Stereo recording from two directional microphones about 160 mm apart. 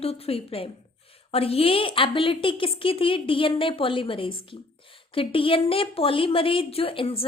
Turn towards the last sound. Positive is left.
turn(degrees=35)  # may be behind; listen again after turning